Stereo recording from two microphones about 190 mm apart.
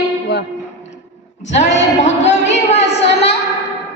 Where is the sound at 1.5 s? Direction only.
35° left (ahead or behind).